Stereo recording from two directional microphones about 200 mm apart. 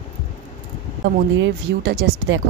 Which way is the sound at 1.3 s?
60° right (ahead or behind).